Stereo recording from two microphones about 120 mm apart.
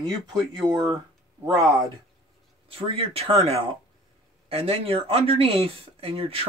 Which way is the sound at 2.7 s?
55° right (ahead or behind).